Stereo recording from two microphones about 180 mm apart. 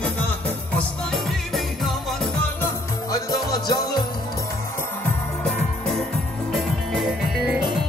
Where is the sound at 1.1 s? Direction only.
Centre (ahead or behind).